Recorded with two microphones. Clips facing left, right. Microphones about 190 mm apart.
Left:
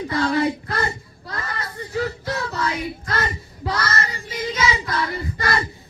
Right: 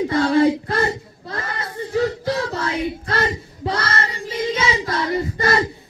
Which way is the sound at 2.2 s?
30° right (ahead or behind).